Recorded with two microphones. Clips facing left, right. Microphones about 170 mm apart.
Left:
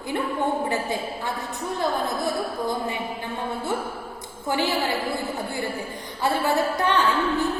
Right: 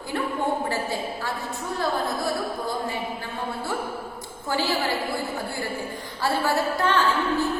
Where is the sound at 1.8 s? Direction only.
20° left (ahead or behind).